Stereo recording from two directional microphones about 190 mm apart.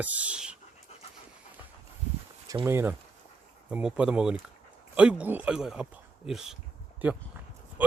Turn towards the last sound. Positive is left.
turn(degrees=-10)  # may be behind; listen again after turning